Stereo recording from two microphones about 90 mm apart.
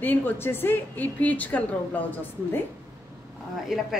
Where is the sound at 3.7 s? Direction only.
5° right (ahead or behind).